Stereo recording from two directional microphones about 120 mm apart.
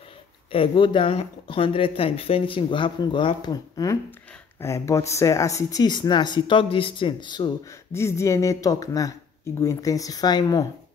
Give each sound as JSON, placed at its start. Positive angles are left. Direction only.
{"t": 0.5, "sound": "speech", "side_deg": 45}
{"t": 7.9, "sound": "speech", "side_deg": 25}